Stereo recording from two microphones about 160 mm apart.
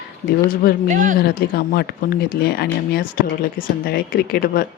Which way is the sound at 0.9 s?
55° right (ahead or behind).